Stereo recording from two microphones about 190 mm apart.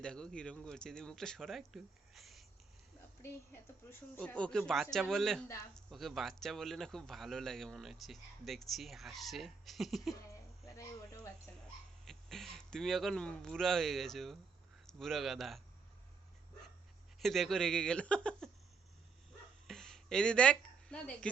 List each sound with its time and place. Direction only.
0.0 s speech: 5° left (ahead or behind)
3.2 s speech: 15° left (ahead or behind)
10.7 s a sound: 15° left (ahead or behind)
12.0 s speech: centre (ahead or behind)
17.2 s speech: centre (ahead or behind)
19.6 s a sound: centre (ahead or behind)